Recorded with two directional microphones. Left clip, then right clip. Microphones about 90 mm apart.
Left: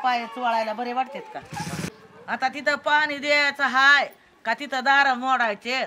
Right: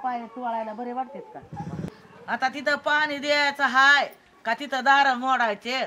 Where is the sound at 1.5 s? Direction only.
90° left.